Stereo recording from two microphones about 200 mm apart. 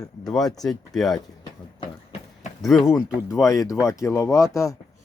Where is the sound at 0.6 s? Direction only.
Centre (ahead or behind).